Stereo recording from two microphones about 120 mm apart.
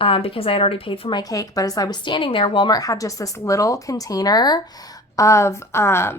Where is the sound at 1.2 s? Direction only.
30° left (ahead or behind).